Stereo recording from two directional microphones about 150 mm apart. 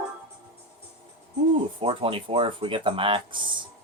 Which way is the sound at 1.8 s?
40° right (ahead or behind).